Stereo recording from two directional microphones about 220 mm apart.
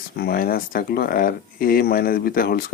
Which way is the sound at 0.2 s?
45° left (ahead or behind).